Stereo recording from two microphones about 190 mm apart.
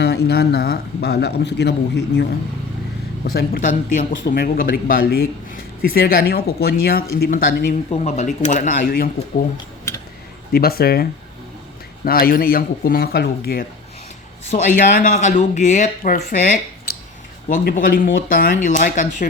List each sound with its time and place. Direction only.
0.0 s a man's voice: 60° left (ahead or behind)
3.2 s a man's voice: 55° left (ahead or behind)
7.9 s speech: 35° left (ahead or behind)
10.5 s a man's voice: 55° left (ahead or behind)
12.0 s a man's voice: 50° left (ahead or behind)
14.5 s a man's voice: 40° left (ahead or behind)